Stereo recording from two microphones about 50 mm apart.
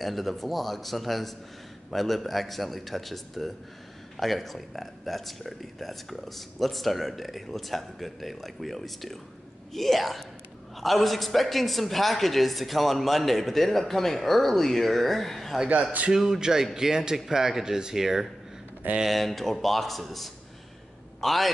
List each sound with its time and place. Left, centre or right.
0.0 s a man's voice: centre
16.1 s a man's voice: centre